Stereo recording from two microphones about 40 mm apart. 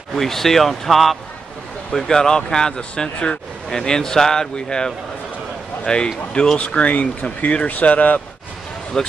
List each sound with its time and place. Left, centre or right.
0.1 s speech: centre
1.9 s speech: centre
6.6 s speech: left
7.6 s speech: left
9.0 s speech: centre